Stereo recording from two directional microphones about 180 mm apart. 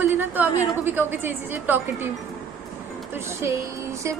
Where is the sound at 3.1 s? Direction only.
15° right (ahead or behind).